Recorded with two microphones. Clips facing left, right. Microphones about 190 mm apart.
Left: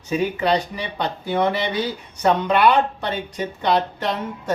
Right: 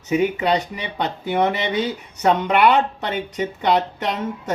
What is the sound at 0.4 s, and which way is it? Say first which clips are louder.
Speech: even; 20° right (ahead or behind).